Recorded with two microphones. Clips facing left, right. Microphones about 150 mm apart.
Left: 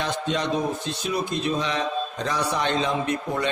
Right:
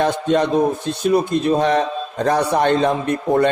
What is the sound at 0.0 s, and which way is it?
A man's voice, 50° right (ahead or behind).